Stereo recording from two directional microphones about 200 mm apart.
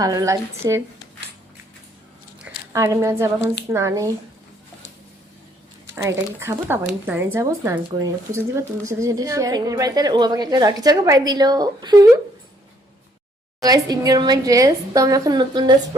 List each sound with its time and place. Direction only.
0.0 s speech: 15° right (ahead or behind)
2.7 s speech: 15° right (ahead or behind)
5.8 s speech: 15° right (ahead or behind)
13.6 s a woman's voice: 20° right (ahead or behind)